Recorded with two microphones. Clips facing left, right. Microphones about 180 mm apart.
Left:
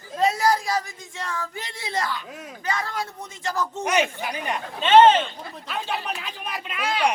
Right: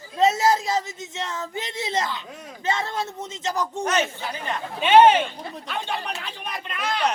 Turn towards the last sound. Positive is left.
turn(degrees=5)  # may be behind; listen again after turning